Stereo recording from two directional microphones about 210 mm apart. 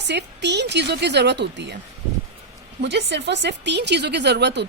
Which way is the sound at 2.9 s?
55° right (ahead or behind).